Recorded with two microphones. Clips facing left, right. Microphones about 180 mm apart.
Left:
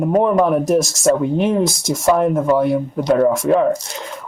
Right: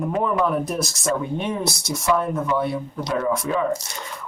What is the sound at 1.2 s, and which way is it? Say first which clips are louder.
Speech: left 9 dB; 90° left.